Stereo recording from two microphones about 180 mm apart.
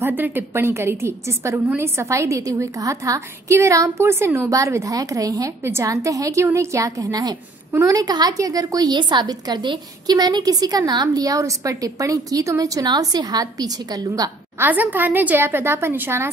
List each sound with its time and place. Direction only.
0.0 s a woman's voice: 10° right (ahead or behind)